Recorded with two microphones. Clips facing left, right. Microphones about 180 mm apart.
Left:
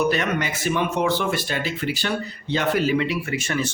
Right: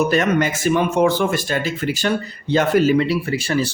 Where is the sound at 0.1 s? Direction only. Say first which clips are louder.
Right 6 dB; 45° right (ahead or behind).